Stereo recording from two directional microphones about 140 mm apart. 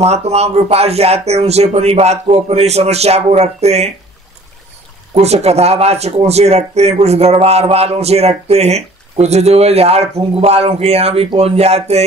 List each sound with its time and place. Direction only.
0.0 s speech: 50° right (ahead or behind)
5.1 s speech: 50° right (ahead or behind)